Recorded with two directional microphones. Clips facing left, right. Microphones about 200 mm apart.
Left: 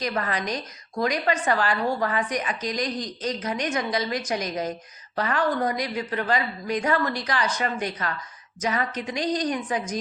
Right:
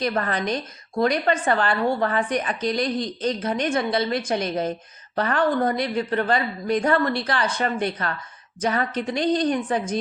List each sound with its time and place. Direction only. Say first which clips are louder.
0.0 s a woman's voice: right 3 dB; 30° right (ahead or behind)